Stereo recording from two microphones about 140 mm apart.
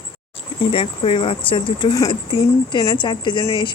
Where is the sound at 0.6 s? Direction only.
40° left (ahead or behind).